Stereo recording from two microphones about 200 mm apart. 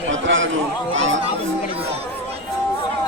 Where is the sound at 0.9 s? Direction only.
70° right (ahead or behind).